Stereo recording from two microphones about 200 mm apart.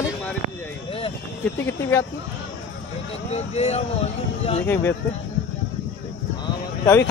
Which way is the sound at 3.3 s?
30° left (ahead or behind).